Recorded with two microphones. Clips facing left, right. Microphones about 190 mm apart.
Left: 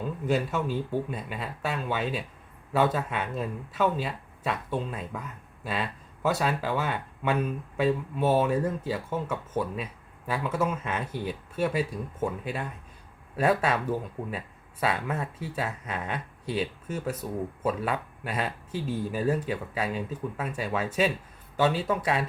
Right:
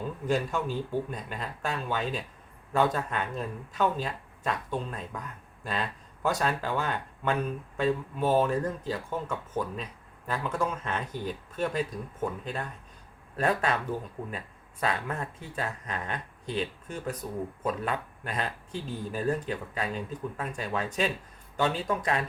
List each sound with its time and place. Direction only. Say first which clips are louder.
0.3 s speech: left 1 dB; 5° left (ahead or behind)